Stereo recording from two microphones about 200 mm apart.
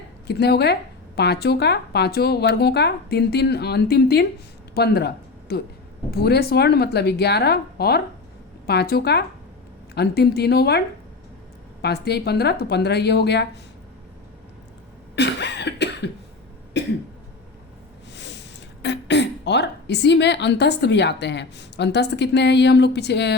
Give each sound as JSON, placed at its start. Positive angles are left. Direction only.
{"t": 0.3, "sound": "speech", "side_deg": 55}
{"t": 15.1, "sound": "cough", "side_deg": 60}
{"t": 18.1, "sound": "a sound", "side_deg": 60}
{"t": 18.8, "sound": "speech", "side_deg": 60}